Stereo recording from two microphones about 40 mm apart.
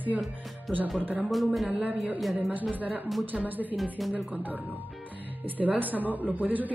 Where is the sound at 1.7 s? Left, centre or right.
Right.